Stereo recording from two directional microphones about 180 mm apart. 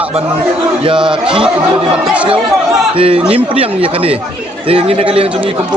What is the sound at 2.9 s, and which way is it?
A man's voice, 30° right (ahead or behind).